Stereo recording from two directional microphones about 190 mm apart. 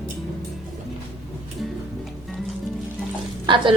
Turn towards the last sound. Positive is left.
turn(degrees=-25)  # may be behind; listen again after turning